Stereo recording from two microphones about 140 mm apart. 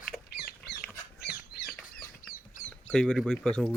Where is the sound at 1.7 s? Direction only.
5° left (ahead or behind).